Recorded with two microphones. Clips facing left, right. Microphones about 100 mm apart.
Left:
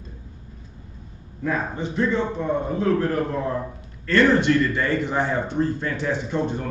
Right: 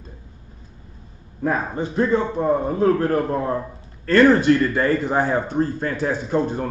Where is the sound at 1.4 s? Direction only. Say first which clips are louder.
Right 3 dB; 40° right (ahead or behind).